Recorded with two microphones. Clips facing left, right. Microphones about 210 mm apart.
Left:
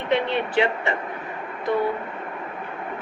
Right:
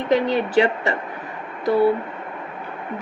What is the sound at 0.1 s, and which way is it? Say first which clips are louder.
Speech: right 4 dB; 40° right (ahead or behind).